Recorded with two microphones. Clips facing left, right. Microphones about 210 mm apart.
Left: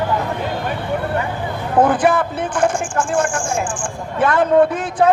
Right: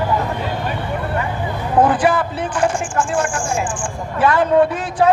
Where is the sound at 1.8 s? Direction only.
50° left (ahead or behind).